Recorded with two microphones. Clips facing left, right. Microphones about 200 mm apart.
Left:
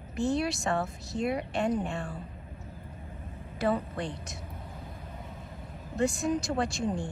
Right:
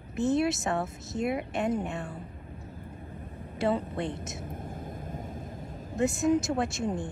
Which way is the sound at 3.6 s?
25° right (ahead or behind).